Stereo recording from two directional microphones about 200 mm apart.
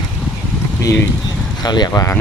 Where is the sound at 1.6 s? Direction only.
20° left (ahead or behind).